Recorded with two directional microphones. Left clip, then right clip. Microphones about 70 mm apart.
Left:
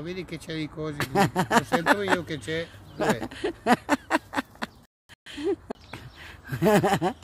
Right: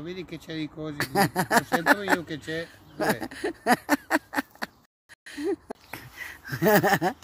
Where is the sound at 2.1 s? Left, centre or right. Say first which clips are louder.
Left 2 dB; centre.